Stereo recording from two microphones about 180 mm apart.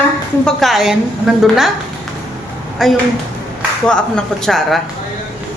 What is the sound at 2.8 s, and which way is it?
Speech, centre (ahead or behind).